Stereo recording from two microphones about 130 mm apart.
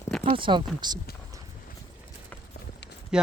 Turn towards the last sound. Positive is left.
turn(degrees=-5)  # may be behind; listen again after turning